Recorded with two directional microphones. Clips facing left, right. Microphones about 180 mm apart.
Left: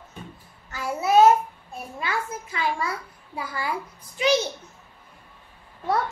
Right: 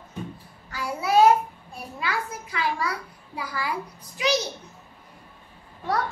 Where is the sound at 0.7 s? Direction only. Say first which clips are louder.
Left 2 dB; 25° left (ahead or behind).